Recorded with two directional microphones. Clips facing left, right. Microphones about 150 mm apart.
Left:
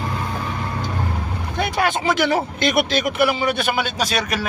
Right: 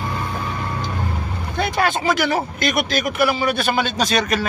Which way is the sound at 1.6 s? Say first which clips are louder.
Right 1 dB; 15° left (ahead or behind).